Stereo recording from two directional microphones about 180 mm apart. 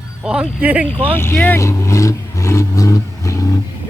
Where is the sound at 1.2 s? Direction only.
10° left (ahead or behind).